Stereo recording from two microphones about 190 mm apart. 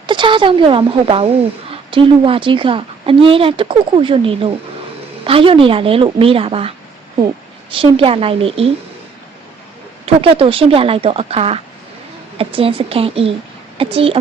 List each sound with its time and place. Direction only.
0.1 s a woman's voice: 25° right (ahead or behind)
10.1 s a woman's voice: 30° right (ahead or behind)